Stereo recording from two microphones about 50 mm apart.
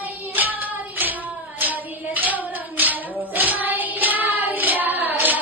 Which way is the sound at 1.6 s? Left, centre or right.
Right.